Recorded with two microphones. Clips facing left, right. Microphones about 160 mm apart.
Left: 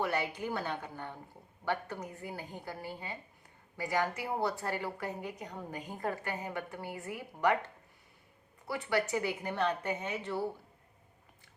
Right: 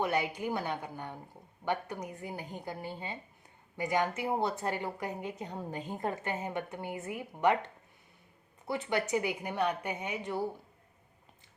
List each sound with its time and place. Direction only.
0.0 s a woman's voice: 15° right (ahead or behind)